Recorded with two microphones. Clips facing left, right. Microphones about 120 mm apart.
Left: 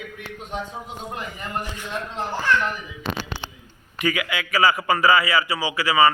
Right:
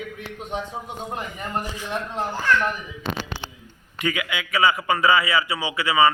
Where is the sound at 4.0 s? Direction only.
20° right (ahead or behind).